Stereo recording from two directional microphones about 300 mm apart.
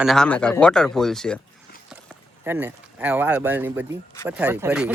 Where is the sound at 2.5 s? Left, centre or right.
Centre.